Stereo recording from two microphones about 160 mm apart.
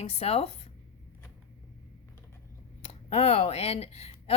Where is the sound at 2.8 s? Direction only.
40° left (ahead or behind).